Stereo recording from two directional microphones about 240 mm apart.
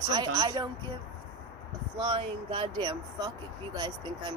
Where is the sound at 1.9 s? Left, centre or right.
Centre.